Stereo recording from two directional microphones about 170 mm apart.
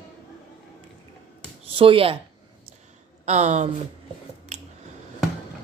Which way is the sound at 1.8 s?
30° right (ahead or behind).